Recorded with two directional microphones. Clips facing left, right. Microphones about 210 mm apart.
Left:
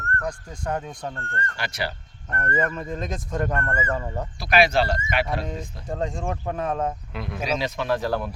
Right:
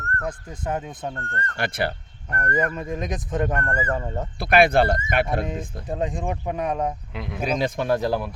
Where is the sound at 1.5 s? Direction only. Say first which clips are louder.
Right 7 dB; 55° right (ahead or behind).